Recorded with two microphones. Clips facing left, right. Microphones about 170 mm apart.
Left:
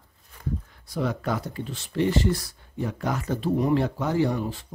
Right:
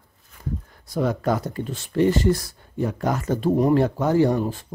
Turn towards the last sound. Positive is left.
turn(degrees=-45)  # may be behind; listen again after turning